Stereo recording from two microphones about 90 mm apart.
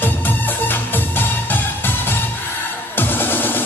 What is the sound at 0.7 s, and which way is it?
Music, 20° left (ahead or behind).